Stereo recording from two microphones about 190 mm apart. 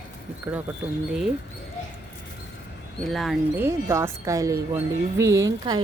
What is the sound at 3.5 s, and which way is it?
Speech, 15° right (ahead or behind).